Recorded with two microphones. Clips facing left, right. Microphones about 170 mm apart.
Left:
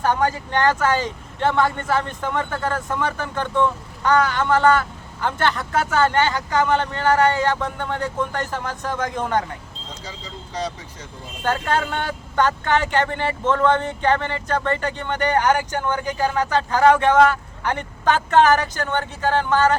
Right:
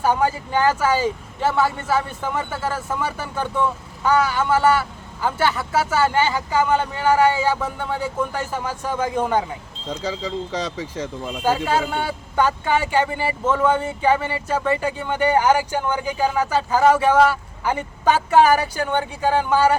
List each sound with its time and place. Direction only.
0.0 s speech: 10° right (ahead or behind)
10.0 s speech: 90° right
11.4 s speech: 10° right (ahead or behind)